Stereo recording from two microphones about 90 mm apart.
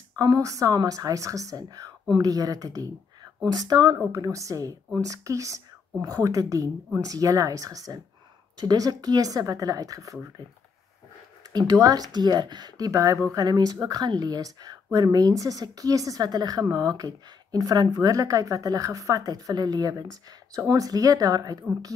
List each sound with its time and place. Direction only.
0.1 s speech: 45° right (ahead or behind)
4.1 s speech: 35° right (ahead or behind)
11.5 s speech: 45° right (ahead or behind)